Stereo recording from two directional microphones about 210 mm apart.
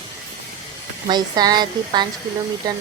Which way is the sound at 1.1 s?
20° right (ahead or behind).